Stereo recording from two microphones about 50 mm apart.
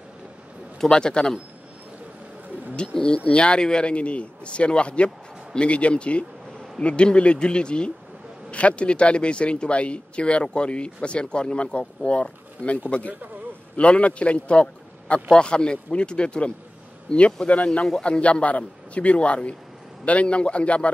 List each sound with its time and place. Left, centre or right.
0.7 s a man's voice: centre
3.0 s speech: centre
13.7 s a man's voice: left